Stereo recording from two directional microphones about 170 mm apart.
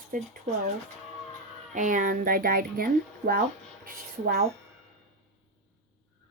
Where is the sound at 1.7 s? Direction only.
50° right (ahead or behind).